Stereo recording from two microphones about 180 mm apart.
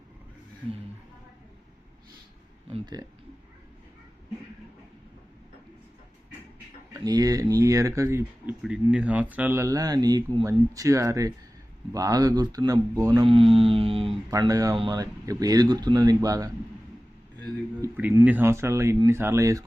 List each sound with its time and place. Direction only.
2.7 s speech: 25° right (ahead or behind)
6.9 s speech: 20° right (ahead or behind)
14.3 s speech: 20° right (ahead or behind)